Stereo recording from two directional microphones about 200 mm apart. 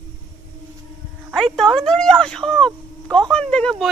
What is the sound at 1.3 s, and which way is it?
Speech, centre (ahead or behind).